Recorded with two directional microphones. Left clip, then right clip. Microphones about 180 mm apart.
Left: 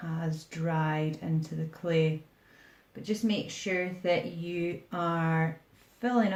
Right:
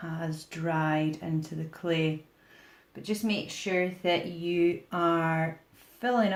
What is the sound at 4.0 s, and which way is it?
Speech, 35° right (ahead or behind).